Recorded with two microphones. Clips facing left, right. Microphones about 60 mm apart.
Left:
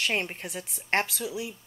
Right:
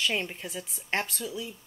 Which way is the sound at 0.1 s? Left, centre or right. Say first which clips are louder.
Left 2 dB; left.